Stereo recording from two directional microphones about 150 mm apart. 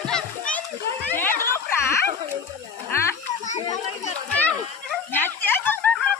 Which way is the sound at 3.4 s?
55° left (ahead or behind).